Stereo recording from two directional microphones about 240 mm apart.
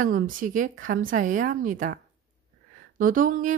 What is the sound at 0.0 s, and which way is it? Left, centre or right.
A woman's voice, right.